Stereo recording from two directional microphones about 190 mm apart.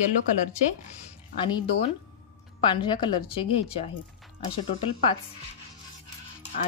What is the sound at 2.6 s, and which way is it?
Speech, 25° left (ahead or behind).